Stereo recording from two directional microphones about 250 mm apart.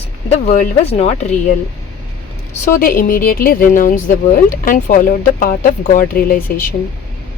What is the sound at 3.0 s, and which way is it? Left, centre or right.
Speech, left.